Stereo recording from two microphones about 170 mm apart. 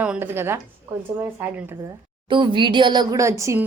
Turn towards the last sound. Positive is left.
turn(degrees=-15)  # may be behind; listen again after turning